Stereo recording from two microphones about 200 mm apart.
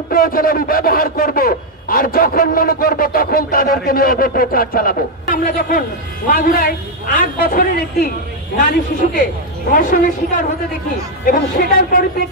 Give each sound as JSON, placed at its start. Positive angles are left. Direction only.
{"t": 0.1, "sound": "a man's voice", "side_deg": 45}